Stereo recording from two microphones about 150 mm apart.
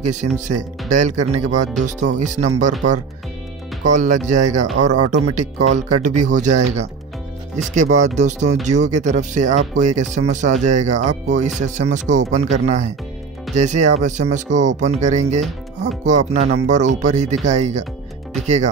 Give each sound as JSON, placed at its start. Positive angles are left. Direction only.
{"t": 0.0, "sound": "speech", "side_deg": -55}
{"t": 3.8, "sound": "speech", "side_deg": -55}